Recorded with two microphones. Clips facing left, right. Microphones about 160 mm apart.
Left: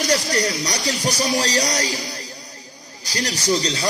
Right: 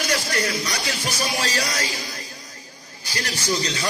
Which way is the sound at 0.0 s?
35° left (ahead or behind).